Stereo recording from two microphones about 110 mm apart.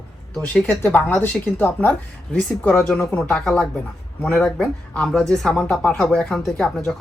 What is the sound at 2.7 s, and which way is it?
Speech, 5° left (ahead or behind).